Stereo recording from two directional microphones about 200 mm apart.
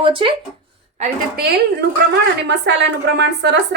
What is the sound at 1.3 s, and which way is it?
A woman's voice, 50° right (ahead or behind).